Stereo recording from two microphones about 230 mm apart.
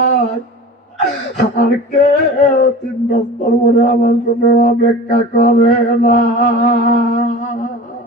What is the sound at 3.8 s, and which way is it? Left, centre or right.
Mantra, left.